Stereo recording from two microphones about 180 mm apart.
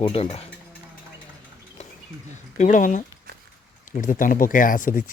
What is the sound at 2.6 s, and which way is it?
Speech, 45° left (ahead or behind).